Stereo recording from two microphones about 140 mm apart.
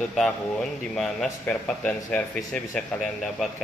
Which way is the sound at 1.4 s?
10° left (ahead or behind).